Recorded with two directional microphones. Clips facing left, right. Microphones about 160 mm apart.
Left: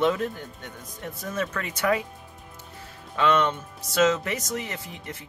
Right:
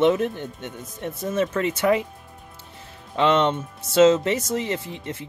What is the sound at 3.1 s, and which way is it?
Speech, 25° right (ahead or behind).